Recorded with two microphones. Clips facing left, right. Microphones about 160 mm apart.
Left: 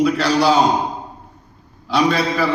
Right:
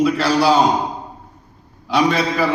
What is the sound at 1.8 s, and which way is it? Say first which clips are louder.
Speech: even; 10° right (ahead or behind).